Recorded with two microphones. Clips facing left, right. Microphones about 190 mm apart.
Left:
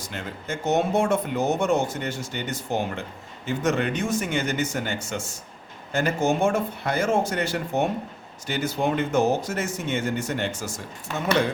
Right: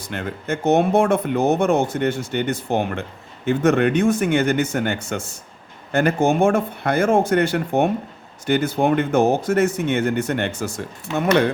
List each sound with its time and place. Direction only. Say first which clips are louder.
0.0 s speech: right 6 dB; 60° right (ahead or behind)